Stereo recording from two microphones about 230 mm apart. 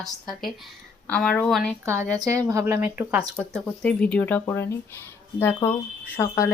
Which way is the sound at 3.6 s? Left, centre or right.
Centre.